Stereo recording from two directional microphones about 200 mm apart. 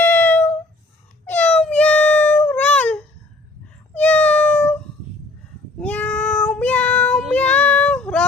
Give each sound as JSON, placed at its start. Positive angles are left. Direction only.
{"t": 0.0, "sound": "a sound", "side_deg": 10}
{"t": 1.2, "sound": "cat", "side_deg": 10}
{"t": 5.8, "sound": "meow", "side_deg": 10}